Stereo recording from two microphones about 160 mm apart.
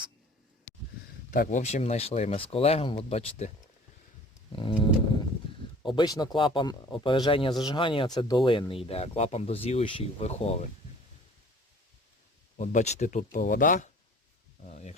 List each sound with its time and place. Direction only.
1.3 s speech: 55° left (ahead or behind)
4.5 s a sound: 30° left (ahead or behind)
5.8 s speech: 30° left (ahead or behind)
12.5 s speech: 50° left (ahead or behind)